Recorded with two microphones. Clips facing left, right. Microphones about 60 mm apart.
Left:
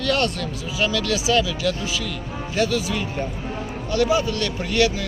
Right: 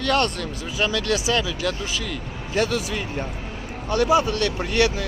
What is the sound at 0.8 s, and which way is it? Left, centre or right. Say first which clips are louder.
Speech: left 1 dB; right.